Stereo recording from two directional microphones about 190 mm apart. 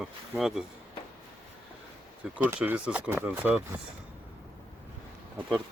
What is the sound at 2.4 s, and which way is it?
Speech, 5° right (ahead or behind).